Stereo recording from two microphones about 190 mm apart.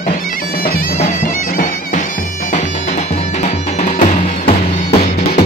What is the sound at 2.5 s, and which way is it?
Music, 35° left (ahead or behind).